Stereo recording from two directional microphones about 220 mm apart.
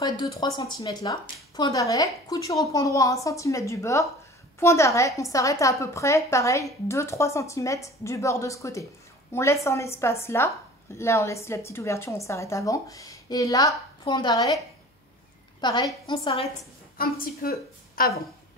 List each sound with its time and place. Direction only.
0.0 s a woman's voice: 20° left (ahead or behind)
15.6 s a woman's voice: 20° left (ahead or behind)
16.9 s a woman's voice: 40° left (ahead or behind)